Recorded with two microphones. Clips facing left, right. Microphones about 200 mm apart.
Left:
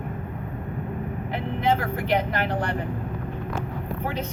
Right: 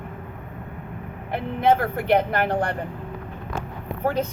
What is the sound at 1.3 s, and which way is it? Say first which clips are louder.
Speech: right 4 dB; 55° right (ahead or behind).